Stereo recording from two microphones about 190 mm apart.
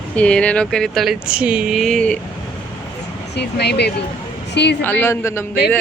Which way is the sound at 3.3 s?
60° left (ahead or behind).